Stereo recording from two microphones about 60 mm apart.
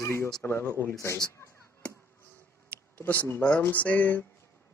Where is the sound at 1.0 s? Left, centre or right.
Left.